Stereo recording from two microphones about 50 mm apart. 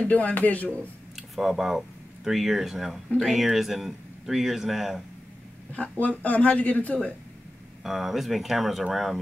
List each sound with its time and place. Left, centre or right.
0.0 s a man's voice: left
1.1 s speech: centre
5.7 s a man's voice: left
7.8 s speech: centre